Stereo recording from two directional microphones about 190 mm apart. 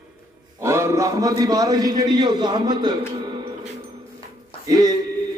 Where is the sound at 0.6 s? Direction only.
15° right (ahead or behind).